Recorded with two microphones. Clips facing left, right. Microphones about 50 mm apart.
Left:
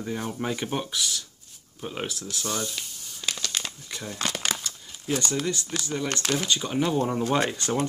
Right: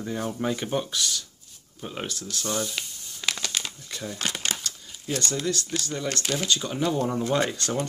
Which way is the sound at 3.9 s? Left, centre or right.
Centre.